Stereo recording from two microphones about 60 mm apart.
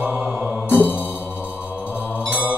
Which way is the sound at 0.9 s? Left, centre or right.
Left.